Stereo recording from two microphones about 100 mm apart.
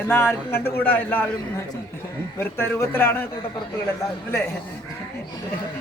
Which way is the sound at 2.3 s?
25° left (ahead or behind).